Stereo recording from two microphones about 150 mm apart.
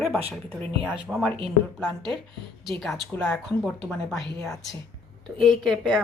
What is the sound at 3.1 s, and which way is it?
Speech, 10° left (ahead or behind).